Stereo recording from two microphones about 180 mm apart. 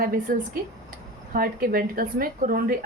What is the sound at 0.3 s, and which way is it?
A woman's voice, 50° right (ahead or behind).